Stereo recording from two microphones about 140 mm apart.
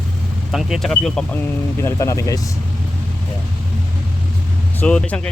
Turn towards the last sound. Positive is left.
turn(degrees=10)  # may be behind; listen again after turning